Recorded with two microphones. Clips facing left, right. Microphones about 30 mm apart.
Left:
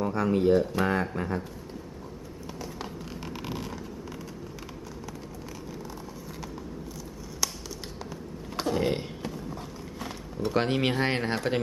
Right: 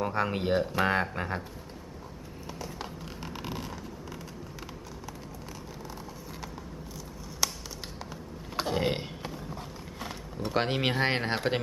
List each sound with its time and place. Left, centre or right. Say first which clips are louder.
0.0 s speech: left 4 dB; right
3.2 s vehicle: left 1 dB; centre
7.4 s tap: right 1 dB; centre
8.5 s a sound: left 2 dB; centre
10.0 s speech: left 4 dB; centre